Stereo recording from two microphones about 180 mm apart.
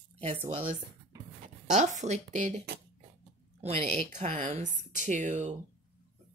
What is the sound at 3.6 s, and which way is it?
Speech, 40° right (ahead or behind).